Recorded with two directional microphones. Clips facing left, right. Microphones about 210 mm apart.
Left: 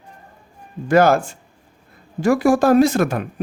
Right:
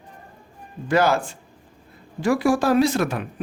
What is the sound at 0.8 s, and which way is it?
Speech, 50° left (ahead or behind).